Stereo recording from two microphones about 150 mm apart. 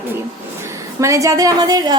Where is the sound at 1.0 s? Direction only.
20° right (ahead or behind).